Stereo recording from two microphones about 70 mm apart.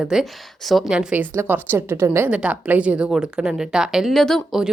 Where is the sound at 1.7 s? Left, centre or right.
Right.